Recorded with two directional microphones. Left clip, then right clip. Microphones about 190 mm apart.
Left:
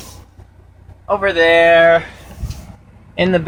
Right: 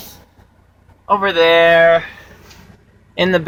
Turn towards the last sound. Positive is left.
turn(degrees=0)  # may be behind; listen again after turning